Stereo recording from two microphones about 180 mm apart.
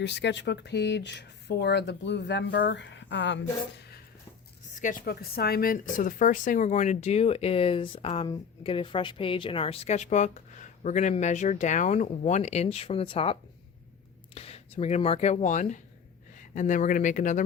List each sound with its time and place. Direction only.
0.0 s speech: 75° left (ahead or behind)
4.7 s speech: 45° left (ahead or behind)
14.3 s speech: 35° left (ahead or behind)